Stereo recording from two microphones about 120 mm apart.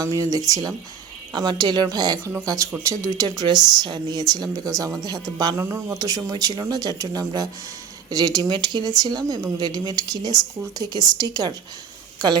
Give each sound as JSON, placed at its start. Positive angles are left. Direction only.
{"t": 0.0, "sound": "speech", "side_deg": -30}